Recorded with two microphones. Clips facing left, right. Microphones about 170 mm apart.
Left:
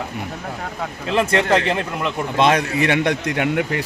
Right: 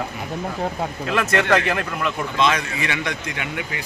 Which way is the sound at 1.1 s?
30° left (ahead or behind).